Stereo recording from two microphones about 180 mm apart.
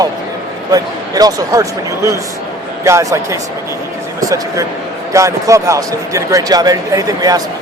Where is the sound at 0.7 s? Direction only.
20° right (ahead or behind).